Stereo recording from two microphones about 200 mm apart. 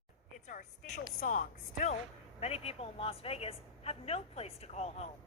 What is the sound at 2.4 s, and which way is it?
Speech, 30° left (ahead or behind).